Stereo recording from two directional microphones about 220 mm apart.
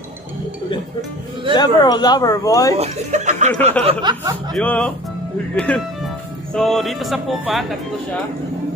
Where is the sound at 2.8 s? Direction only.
30° right (ahead or behind).